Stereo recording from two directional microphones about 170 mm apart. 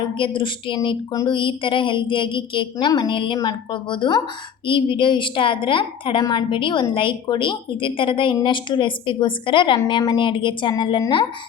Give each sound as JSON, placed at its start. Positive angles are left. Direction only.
{"t": 0.2, "sound": "a woman's voice", "side_deg": 30}